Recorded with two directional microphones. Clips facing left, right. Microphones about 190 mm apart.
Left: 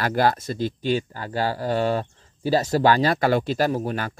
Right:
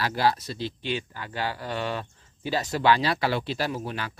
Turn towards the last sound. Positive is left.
turn(degrees=45)  # may be behind; listen again after turning